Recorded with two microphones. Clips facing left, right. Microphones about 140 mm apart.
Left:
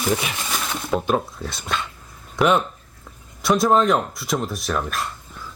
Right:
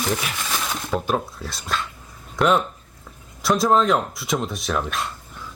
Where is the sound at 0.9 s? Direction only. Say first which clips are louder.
Left 3 dB; centre (ahead or behind).